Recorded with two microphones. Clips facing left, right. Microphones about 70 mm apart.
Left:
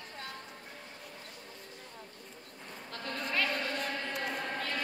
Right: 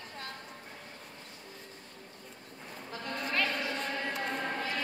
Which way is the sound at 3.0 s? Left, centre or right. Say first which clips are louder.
Right 1 dB; centre.